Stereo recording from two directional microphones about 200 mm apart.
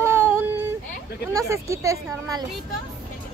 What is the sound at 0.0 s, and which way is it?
Child singing, 10° right (ahead or behind).